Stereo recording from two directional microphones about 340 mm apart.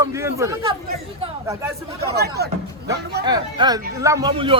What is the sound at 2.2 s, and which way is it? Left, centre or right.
Speech, right.